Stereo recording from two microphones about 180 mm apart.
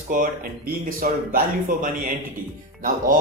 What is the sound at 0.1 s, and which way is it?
A man's voice, 50° right (ahead or behind).